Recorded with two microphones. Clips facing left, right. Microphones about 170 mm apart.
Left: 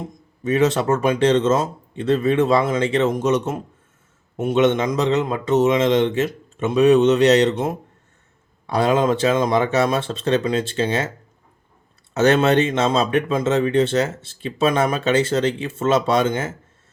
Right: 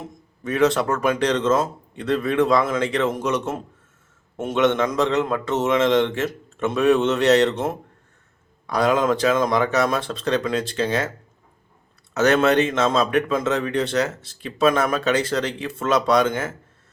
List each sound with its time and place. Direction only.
0.4 s a man's voice: 20° left (ahead or behind)
8.6 s speech: 25° left (ahead or behind)
12.1 s speech: 25° left (ahead or behind)